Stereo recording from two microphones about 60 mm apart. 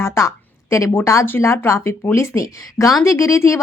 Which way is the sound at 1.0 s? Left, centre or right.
Left.